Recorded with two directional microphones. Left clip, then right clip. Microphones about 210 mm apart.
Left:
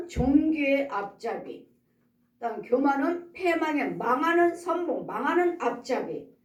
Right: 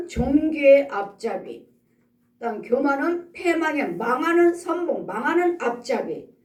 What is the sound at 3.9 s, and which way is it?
A woman's voice, 50° right (ahead or behind).